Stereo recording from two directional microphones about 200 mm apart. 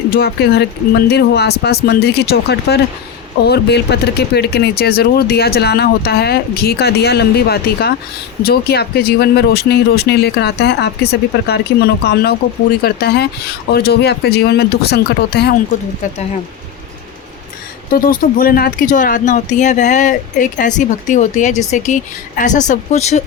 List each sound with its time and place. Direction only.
0.1 s speech: 50° left (ahead or behind)
17.9 s speech: 45° left (ahead or behind)